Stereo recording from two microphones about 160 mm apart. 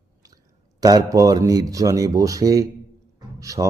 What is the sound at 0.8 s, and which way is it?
A man's voice, 25° right (ahead or behind).